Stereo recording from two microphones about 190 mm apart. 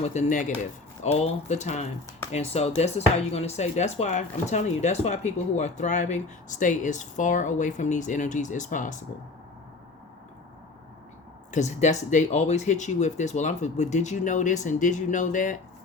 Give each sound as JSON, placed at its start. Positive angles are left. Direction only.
{"t": 0.0, "sound": "speech", "side_deg": 40}
{"t": 11.5, "sound": "speech", "side_deg": 40}